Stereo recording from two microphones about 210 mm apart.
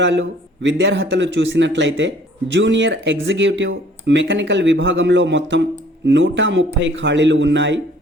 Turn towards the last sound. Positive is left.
turn(degrees=-60)  # may be behind; listen again after turning